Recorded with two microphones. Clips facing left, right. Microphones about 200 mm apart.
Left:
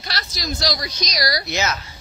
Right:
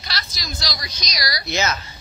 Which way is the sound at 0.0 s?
50° left (ahead or behind).